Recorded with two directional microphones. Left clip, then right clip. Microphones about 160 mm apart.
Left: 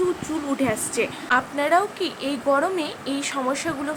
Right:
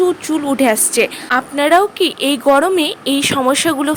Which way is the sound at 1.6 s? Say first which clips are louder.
Right 9 dB; 50° right (ahead or behind).